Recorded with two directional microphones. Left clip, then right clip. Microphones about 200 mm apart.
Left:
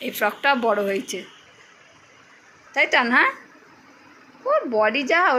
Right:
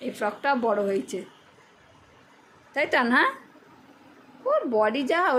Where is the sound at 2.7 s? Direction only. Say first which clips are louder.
Left 4 dB; 20° right (ahead or behind).